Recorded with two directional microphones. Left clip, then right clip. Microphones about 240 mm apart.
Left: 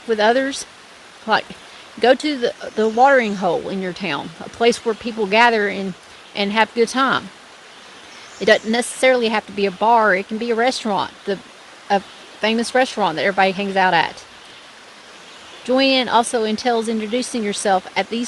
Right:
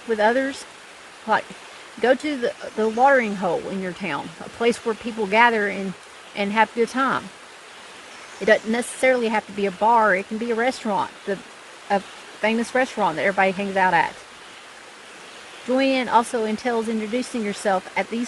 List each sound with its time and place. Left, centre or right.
0.1 s speech: left
2.0 s speech: left
8.4 s speech: left
15.7 s speech: left